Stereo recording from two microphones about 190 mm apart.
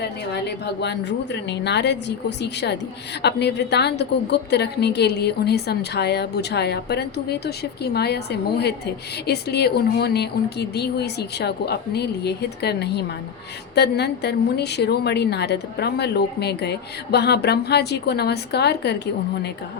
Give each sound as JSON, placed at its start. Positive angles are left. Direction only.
{"t": 0.0, "sound": "a woman's voice", "side_deg": 65}